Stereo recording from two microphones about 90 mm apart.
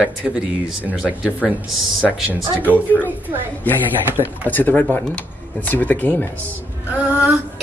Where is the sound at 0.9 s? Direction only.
10° right (ahead or behind).